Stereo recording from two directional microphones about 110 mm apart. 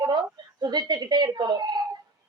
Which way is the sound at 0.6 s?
40° right (ahead or behind).